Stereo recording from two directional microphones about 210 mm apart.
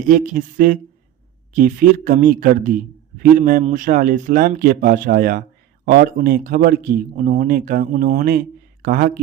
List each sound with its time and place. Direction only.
0.1 s speech: 40° right (ahead or behind)